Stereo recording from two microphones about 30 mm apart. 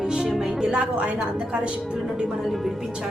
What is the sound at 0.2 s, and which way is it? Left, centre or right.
Music, centre.